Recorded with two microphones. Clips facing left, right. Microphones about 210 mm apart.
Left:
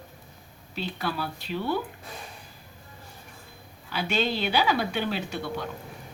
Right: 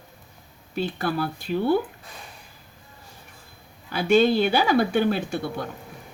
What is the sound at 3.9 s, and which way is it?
Speech, 50° right (ahead or behind).